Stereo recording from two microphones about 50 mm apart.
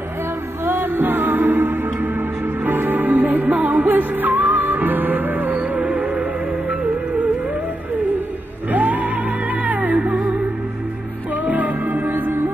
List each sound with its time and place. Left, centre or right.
0.7 s music: right
5.6 s music: right
8.7 s music: right
11.4 s music: right